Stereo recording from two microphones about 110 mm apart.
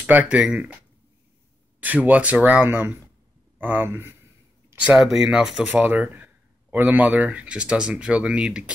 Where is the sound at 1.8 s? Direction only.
15° right (ahead or behind).